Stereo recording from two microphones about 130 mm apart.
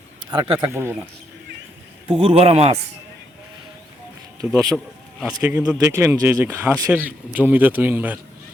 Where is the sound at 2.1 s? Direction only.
45° right (ahead or behind).